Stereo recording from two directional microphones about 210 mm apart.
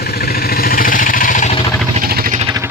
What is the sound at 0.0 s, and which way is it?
Vehicle, 50° left (ahead or behind).